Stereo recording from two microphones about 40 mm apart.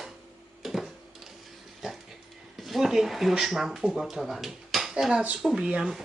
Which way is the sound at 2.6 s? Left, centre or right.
Centre.